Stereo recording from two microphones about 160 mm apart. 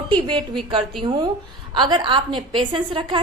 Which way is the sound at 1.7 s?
30° right (ahead or behind).